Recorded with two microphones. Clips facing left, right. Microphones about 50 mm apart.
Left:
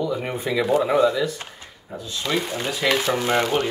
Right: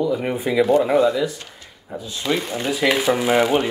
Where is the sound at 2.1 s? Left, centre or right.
Centre.